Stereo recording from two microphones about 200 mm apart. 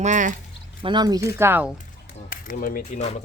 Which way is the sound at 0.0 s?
40° right (ahead or behind).